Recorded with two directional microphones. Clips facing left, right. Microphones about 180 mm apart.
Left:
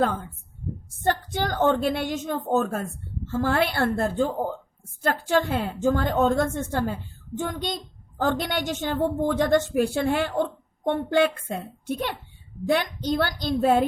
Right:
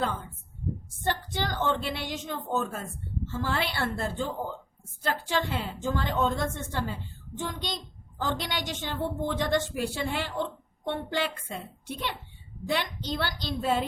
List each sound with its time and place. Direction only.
1.0 s a woman's voice: 50° left (ahead or behind)